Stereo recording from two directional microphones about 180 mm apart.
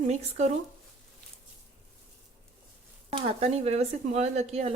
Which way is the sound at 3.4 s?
35° right (ahead or behind).